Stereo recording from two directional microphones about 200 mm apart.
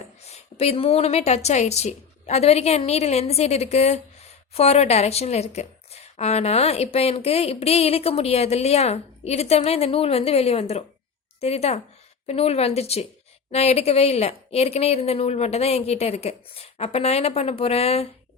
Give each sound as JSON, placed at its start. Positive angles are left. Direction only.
{"t": 0.3, "sound": "a woman's voice", "side_deg": 30}